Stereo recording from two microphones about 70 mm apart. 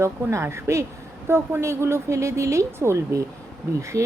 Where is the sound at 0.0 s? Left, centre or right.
Right.